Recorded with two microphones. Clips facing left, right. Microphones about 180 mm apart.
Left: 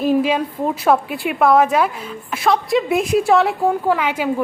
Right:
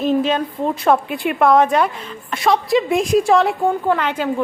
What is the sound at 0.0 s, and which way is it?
A woman's voice, 10° left (ahead or behind).